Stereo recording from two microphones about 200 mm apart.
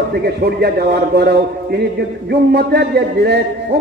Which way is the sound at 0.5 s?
55° right (ahead or behind).